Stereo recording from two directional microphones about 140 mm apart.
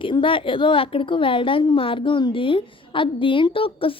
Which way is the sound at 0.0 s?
35° left (ahead or behind).